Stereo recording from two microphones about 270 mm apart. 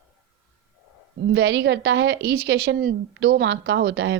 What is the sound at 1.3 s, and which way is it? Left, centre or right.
A woman's voice, right.